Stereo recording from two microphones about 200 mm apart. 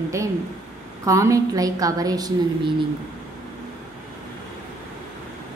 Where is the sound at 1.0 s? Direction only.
15° right (ahead or behind).